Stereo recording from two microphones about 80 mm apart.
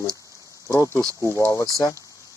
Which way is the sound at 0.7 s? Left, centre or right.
Left.